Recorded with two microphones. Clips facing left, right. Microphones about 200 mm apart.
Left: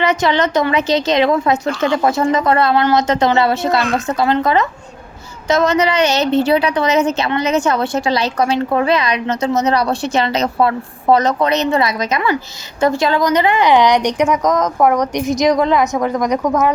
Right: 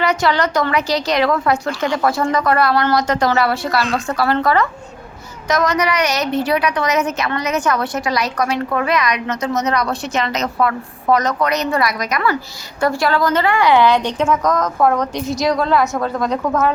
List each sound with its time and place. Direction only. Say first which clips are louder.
0.0 s a woman's voice: left 2 dB; 20° left (ahead or behind)